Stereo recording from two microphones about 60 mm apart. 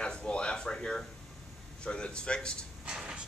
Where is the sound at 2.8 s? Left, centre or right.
Centre.